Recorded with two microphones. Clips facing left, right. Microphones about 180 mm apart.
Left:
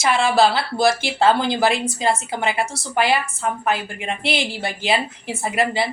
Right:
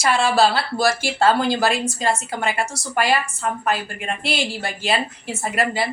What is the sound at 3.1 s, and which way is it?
Speech, 15° left (ahead or behind).